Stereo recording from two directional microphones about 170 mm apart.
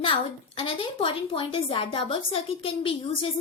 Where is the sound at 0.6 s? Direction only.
30° left (ahead or behind).